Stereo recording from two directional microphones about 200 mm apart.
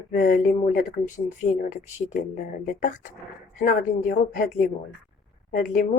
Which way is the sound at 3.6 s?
45° left (ahead or behind).